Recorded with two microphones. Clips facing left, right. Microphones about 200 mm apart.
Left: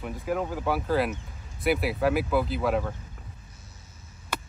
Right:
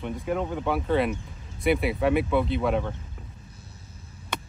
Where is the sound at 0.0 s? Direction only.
Centre (ahead or behind).